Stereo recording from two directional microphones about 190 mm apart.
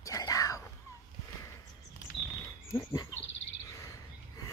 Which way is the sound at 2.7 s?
15° left (ahead or behind).